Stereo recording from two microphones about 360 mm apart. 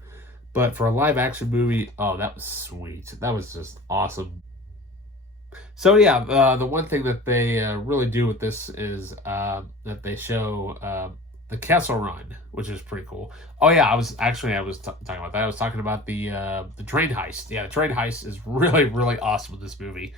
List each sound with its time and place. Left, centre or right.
0.5 s speech: centre
5.5 s speech: centre